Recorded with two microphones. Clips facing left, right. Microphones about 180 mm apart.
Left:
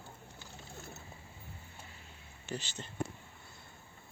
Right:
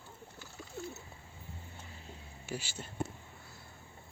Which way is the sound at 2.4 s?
10° right (ahead or behind).